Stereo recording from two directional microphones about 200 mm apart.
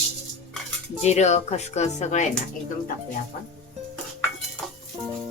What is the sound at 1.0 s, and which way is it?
Speech, 35° left (ahead or behind).